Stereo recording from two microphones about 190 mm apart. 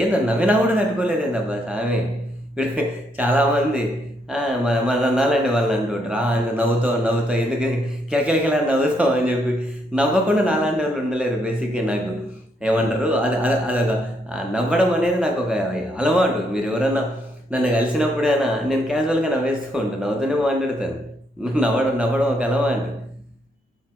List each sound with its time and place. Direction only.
0.1 s a man's voice: 5° right (ahead or behind)